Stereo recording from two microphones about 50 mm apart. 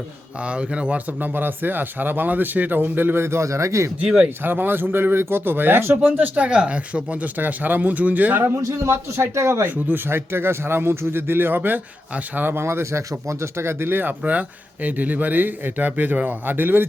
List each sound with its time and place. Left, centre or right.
0.4 s speech: right
1.2 s speech: right
4.4 s speech: right
6.1 s speech: right
6.5 s speech: right
8.7 s speech: right
9.6 s speech: right
10.1 s speech: right
12.5 s speech: right